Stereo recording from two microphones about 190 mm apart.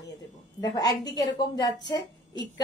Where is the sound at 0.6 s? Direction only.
20° left (ahead or behind).